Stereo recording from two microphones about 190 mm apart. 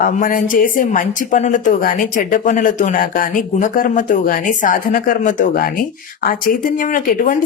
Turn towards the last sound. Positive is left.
turn(degrees=45)  # may be behind; listen again after turning